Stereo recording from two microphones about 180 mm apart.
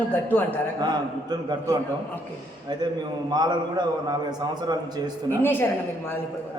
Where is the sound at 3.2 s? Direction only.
25° right (ahead or behind).